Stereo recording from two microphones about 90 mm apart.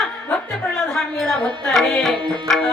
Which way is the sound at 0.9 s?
5° left (ahead or behind).